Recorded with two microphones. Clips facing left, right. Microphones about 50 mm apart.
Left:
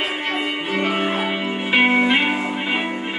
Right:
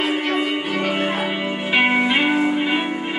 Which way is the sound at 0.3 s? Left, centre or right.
Centre.